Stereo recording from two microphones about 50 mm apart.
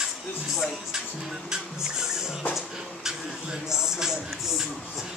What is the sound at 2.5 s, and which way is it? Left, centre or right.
Speech, centre.